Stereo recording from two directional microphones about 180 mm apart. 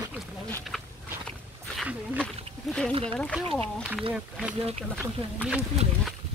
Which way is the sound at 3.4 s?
30° right (ahead or behind).